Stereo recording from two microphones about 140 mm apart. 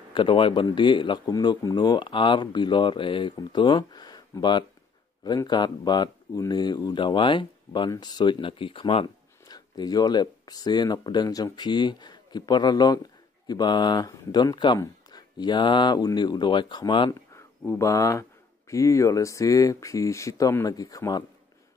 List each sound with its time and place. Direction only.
0.1 s speech: 35° left (ahead or behind)
17.1 s speech: 20° left (ahead or behind)